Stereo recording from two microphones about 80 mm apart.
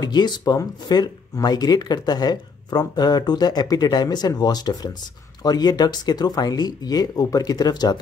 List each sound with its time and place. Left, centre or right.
0.0 s speech: left